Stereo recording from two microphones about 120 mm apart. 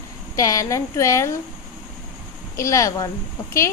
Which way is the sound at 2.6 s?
25° left (ahead or behind).